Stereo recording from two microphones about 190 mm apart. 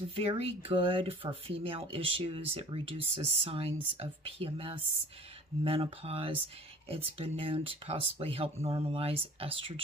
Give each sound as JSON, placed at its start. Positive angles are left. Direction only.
{"t": 0.1, "sound": "speech", "side_deg": -30}